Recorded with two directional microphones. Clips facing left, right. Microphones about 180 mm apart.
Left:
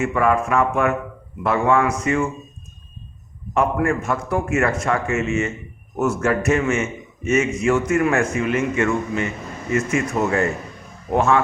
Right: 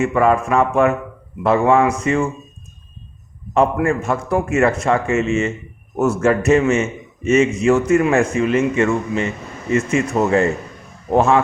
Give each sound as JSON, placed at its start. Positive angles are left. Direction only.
{"t": 0.0, "sound": "a man's voice", "side_deg": -30}
{"t": 3.8, "sound": "a man's voice", "side_deg": -25}